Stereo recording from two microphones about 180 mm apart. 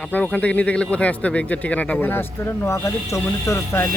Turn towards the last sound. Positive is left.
turn(degrees=15)  # may be behind; listen again after turning